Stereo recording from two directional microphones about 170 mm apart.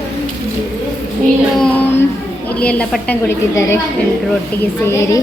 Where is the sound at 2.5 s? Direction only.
5° left (ahead or behind).